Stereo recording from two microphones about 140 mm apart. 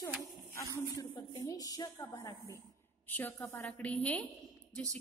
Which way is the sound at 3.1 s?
15° left (ahead or behind).